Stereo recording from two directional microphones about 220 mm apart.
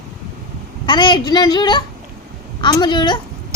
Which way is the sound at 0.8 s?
20° left (ahead or behind).